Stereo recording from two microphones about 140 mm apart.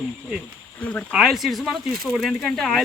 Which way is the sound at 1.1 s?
5° right (ahead or behind).